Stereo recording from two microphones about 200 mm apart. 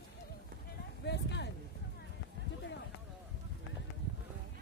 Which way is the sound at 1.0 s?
60° left (ahead or behind).